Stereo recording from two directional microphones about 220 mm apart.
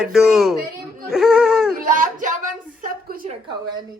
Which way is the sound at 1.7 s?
40° right (ahead or behind).